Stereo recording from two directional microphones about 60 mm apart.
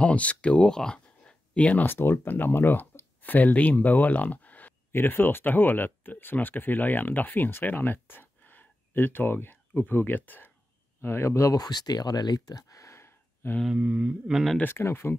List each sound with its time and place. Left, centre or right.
0.0 s speech: left
1.9 s speech: left
4.9 s speech: left
11.0 s speech: left
11.5 s speech: left
13.7 s mantra: right
14.3 s speech: centre
14.6 s speech: left